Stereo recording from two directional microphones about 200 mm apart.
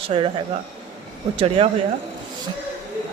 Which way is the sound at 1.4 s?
30° right (ahead or behind).